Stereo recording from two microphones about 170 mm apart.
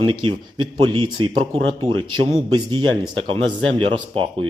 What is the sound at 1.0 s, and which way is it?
Speech, 30° right (ahead or behind).